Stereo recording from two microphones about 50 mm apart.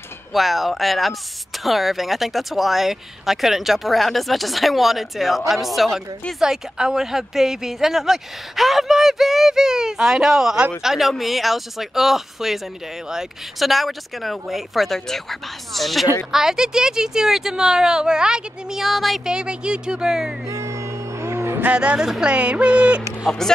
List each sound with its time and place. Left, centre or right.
0.3 s speech: centre
19.2 s speech: centre
20.4 s music: right
21.7 s speech: centre